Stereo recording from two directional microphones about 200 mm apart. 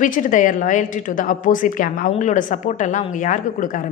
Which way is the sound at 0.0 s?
40° left (ahead or behind).